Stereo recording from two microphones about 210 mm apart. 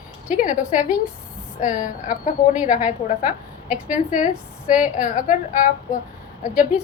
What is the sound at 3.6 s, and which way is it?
A woman's voice, 5° right (ahead or behind).